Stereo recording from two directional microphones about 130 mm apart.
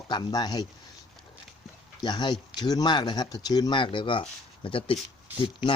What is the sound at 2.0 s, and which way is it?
Speech, 35° left (ahead or behind).